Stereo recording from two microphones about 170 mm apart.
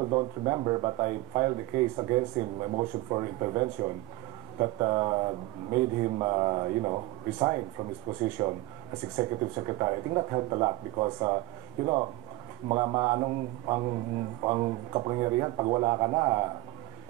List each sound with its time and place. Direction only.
0.0 s speech: 25° right (ahead or behind)